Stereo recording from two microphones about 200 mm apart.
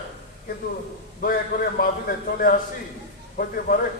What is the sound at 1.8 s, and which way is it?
A man's voice, 45° left (ahead or behind).